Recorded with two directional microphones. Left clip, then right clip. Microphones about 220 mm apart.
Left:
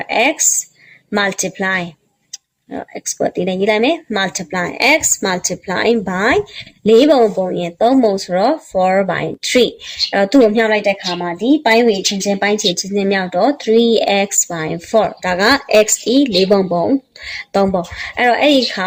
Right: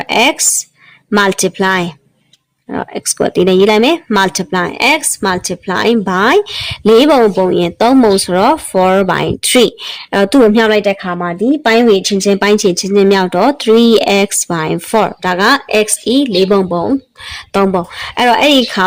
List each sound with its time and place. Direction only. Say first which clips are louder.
0.0 s speech: right 3 dB; 40° right (ahead or behind)
17.7 s speech: right 3 dB; 40° right (ahead or behind)